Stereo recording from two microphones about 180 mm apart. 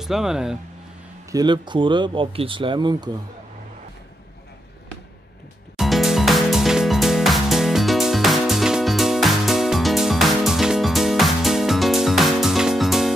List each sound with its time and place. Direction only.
0.0 s speech: centre (ahead or behind)
1.3 s speech: 25° right (ahead or behind)
5.8 s music: centre (ahead or behind)